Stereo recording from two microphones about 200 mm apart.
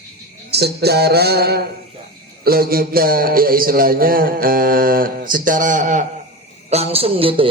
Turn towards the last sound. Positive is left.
turn(degrees=-25)  # may be behind; listen again after turning